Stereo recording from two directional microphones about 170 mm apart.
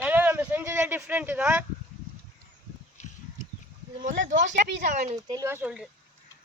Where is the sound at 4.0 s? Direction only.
50° right (ahead or behind).